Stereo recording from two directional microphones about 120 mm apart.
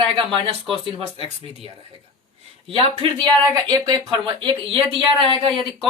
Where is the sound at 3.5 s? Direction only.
30° right (ahead or behind); by 5.6 s 45° right (ahead or behind).